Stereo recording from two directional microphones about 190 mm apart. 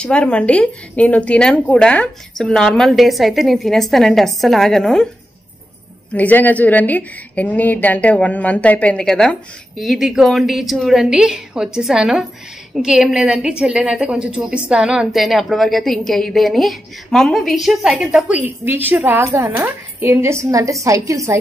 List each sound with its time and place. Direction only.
0.0 s a woman's voice: 5° left (ahead or behind)
6.1 s a woman's voice: 10° left (ahead or behind); by 21.4 s 15° right (ahead or behind)